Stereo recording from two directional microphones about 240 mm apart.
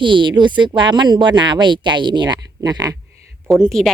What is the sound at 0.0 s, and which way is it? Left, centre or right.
Speech, centre.